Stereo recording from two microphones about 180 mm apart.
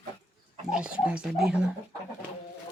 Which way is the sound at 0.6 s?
5° right (ahead or behind).